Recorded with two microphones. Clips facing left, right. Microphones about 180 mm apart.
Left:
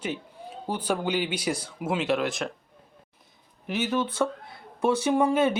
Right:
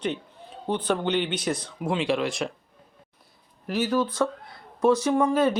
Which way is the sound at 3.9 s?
25° left (ahead or behind).